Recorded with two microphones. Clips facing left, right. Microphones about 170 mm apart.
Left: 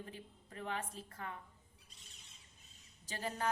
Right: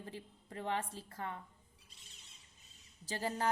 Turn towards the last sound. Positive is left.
turn(degrees=-35)  # may be behind; listen again after turning